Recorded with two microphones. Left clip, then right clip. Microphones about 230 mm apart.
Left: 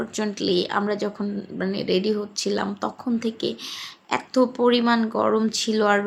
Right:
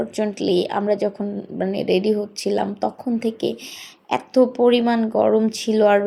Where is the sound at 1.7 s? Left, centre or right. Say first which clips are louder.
Right 3 dB; left.